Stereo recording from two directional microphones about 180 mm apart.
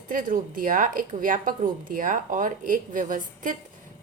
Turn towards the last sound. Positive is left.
turn(degrees=-45)  # may be behind; listen again after turning